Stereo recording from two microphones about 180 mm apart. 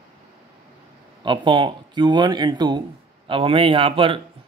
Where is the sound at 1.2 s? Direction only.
25° right (ahead or behind).